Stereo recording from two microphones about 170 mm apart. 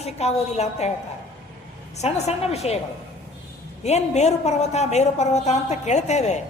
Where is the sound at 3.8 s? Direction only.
40° left (ahead or behind).